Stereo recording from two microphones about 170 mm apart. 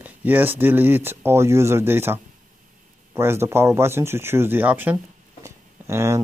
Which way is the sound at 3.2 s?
15° right (ahead or behind).